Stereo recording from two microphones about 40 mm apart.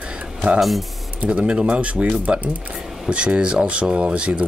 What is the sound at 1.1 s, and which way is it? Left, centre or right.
Speech, right.